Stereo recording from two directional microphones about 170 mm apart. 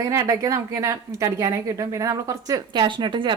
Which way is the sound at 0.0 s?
15° right (ahead or behind).